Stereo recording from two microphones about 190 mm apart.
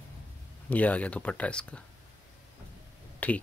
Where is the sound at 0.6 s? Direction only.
10° left (ahead or behind).